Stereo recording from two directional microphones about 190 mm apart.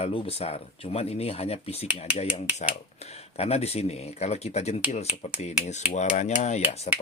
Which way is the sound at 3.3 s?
30° left (ahead or behind).